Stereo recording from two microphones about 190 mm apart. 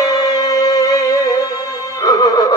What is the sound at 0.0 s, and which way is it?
Music, 20° left (ahead or behind).